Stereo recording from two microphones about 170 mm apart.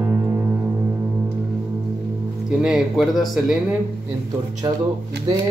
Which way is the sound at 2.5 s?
5° right (ahead or behind).